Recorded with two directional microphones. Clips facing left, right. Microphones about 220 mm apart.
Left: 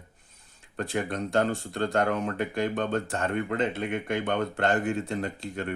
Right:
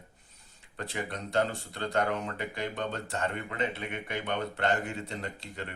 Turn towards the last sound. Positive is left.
turn(degrees=50)  # may be behind; listen again after turning